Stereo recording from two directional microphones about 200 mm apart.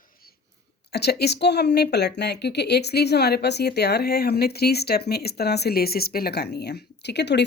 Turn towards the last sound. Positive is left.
turn(degrees=55)  # may be behind; listen again after turning